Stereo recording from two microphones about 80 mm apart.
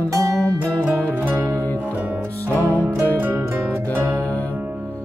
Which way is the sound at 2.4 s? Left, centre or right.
Left.